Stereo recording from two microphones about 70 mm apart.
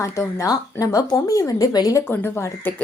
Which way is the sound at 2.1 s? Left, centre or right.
Left.